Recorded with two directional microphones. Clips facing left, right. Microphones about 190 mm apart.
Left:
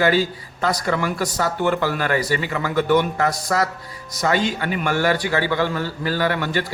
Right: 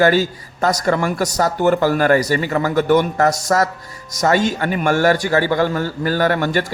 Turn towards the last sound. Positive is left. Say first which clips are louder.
# right 4 dB
turn(degrees=-45)  # may be behind; listen again after turning